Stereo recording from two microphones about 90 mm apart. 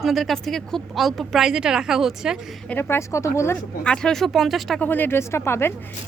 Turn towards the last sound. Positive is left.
turn(degrees=25)  # may be behind; listen again after turning